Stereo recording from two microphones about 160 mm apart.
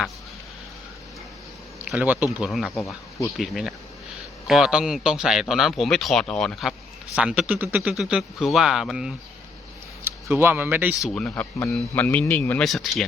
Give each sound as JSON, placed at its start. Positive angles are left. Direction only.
{"t": 1.9, "sound": "a man's voice", "side_deg": -5}
{"t": 2.7, "sound": "speech", "side_deg": 20}
{"t": 3.3, "sound": "a man's voice", "side_deg": 0}
{"t": 10.0, "sound": "speech", "side_deg": -15}
{"t": 10.9, "sound": "speech", "side_deg": 5}
{"t": 12.6, "sound": "a man's voice", "side_deg": 0}